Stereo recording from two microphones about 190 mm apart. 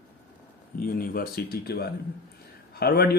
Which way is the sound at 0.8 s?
50° left (ahead or behind).